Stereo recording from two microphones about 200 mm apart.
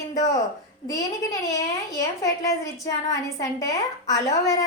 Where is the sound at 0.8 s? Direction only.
20° left (ahead or behind).